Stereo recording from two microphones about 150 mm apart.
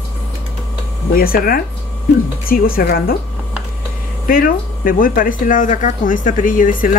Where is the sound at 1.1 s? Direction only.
75° left (ahead or behind).